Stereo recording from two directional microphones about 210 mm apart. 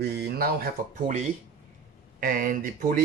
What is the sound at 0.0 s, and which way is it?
Speech, 50° right (ahead or behind).